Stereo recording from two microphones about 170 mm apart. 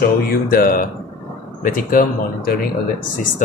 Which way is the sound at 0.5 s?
55° left (ahead or behind).